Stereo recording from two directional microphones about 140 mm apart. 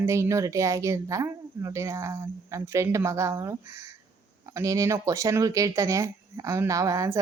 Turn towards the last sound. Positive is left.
turn(degrees=-25)  # may be behind; listen again after turning